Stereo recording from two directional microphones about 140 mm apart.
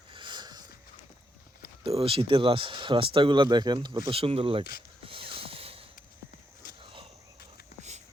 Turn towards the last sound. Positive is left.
turn(degrees=-40)  # may be behind; listen again after turning